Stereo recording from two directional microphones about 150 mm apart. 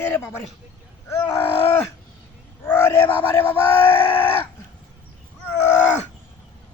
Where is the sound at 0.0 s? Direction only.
15° left (ahead or behind).